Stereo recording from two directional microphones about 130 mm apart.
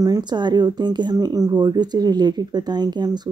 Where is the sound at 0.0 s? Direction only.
30° right (ahead or behind).